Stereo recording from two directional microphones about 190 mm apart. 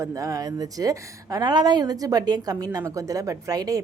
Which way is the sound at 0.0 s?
15° right (ahead or behind).